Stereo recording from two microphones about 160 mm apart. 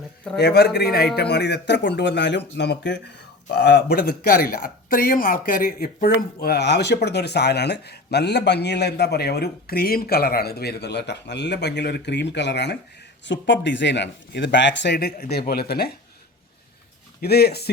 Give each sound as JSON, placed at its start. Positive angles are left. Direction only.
{"t": 0.3, "sound": "speech", "side_deg": 90}
{"t": 17.2, "sound": "speech", "side_deg": 80}